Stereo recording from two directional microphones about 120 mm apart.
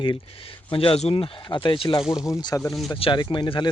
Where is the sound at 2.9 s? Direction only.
45° left (ahead or behind).